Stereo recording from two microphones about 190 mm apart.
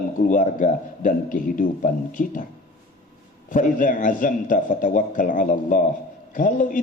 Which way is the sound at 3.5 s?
40° left (ahead or behind).